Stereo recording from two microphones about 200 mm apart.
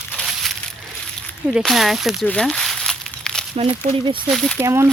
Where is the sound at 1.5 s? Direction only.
Centre (ahead or behind).